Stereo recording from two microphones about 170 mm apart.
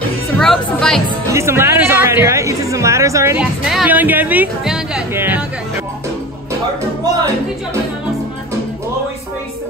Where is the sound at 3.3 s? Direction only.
5° right (ahead or behind).